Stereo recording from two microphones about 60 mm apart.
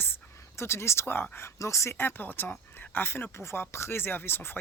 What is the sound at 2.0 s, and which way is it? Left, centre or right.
Speech, left.